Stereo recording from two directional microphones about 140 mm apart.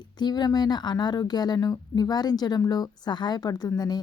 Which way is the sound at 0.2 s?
30° left (ahead or behind).